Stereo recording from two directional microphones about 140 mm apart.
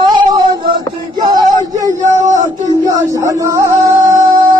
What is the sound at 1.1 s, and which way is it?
Music, 30° right (ahead or behind).